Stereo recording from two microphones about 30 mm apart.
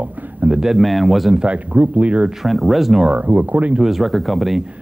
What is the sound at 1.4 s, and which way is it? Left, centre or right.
Speech, right.